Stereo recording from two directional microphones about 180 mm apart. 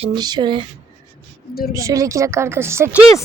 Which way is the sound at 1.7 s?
20° right (ahead or behind).